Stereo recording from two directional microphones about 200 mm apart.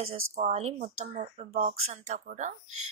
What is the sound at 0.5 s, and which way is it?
Speech, 30° right (ahead or behind).